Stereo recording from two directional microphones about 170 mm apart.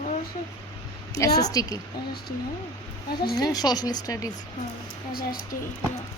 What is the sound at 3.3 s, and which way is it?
Speech, 25° left (ahead or behind).